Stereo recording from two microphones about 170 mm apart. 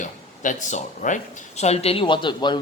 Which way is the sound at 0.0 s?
45° left (ahead or behind).